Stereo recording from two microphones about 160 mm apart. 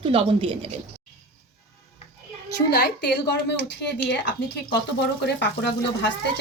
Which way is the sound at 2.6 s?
90° left.